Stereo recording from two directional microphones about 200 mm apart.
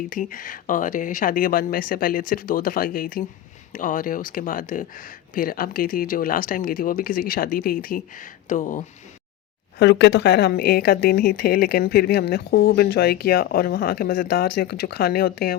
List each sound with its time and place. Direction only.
0.1 s speech: 40° left (ahead or behind)
9.7 s speech: 60° left (ahead or behind)